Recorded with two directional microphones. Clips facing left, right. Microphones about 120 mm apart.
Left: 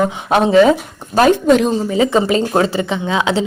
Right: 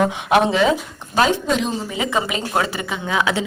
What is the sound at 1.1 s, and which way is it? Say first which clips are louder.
Speech: left 7 dB; 55° left (ahead or behind).